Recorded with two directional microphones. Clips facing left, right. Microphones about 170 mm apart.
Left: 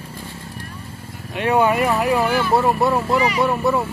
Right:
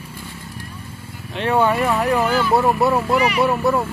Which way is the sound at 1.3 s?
10° left (ahead or behind).